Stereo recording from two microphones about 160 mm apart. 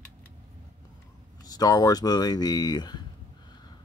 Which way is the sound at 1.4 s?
25° left (ahead or behind).